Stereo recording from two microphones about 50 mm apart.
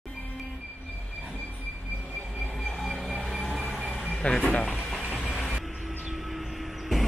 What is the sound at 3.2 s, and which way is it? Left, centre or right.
Train, centre.